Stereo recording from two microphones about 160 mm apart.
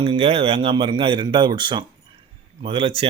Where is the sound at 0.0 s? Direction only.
35° right (ahead or behind).